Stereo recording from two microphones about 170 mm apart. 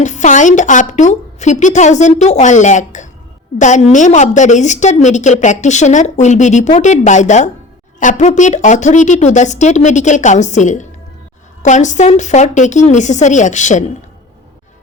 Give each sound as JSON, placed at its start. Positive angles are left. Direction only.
{"t": 0.0, "sound": "a woman's voice", "side_deg": 45}